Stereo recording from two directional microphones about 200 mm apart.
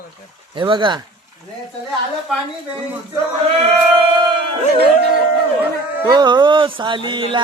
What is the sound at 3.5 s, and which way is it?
Speech, 30° right (ahead or behind).